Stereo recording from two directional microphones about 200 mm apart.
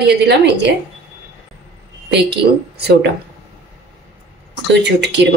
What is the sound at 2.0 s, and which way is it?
Speech, 55° right (ahead or behind).